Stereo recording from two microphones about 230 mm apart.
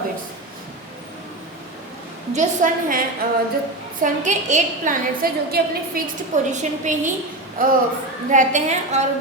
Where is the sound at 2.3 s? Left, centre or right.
Right.